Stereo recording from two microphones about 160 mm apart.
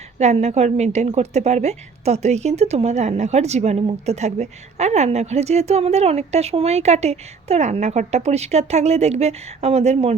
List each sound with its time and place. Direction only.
0.2 s a woman's voice: 45° right (ahead or behind)